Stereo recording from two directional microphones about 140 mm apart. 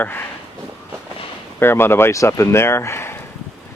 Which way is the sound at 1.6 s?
15° left (ahead or behind).